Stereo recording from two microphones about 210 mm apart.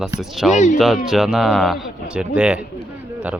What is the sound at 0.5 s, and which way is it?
Speech, 35° left (ahead or behind).